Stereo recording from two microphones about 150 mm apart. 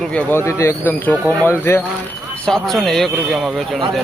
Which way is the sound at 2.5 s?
5° left (ahead or behind).